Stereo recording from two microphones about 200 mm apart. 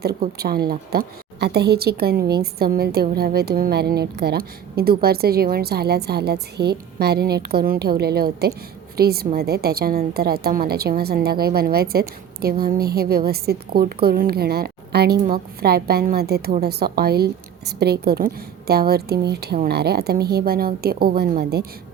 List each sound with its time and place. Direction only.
0.3 s a woman's voice: 50° right (ahead or behind)